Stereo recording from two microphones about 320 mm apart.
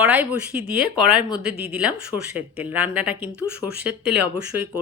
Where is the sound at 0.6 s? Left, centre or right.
Right.